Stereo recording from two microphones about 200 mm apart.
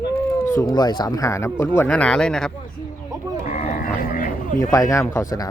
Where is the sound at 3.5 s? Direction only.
35° left (ahead or behind).